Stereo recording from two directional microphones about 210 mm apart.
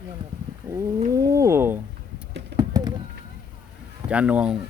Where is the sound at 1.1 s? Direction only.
15° right (ahead or behind).